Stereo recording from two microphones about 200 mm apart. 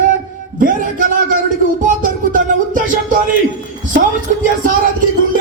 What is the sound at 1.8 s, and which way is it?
Music, 40° right (ahead or behind).